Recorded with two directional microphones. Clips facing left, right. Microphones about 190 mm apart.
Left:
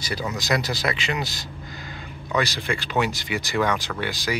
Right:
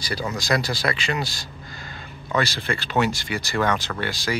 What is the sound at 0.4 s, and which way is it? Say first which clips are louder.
Speech: right 1 dB; 20° left (ahead or behind).